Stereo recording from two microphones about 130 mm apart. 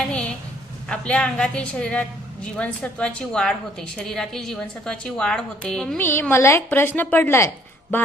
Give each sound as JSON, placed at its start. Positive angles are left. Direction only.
{"t": 0.0, "sound": "a sound", "side_deg": 10}
{"t": 0.9, "sound": "a woman's voice", "side_deg": 5}
{"t": 6.0, "sound": "a woman's voice", "side_deg": 15}